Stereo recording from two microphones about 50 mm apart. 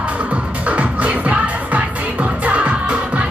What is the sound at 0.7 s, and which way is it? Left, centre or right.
Music, right.